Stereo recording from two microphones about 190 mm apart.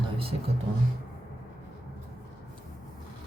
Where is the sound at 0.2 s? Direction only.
30° right (ahead or behind).